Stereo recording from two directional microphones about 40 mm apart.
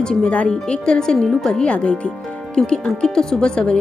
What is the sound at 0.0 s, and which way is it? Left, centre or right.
Speech, centre.